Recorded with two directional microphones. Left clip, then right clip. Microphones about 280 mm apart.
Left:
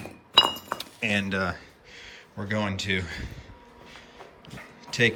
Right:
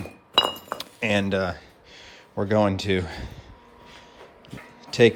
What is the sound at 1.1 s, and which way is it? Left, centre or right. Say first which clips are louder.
Speech: right 4 dB; centre.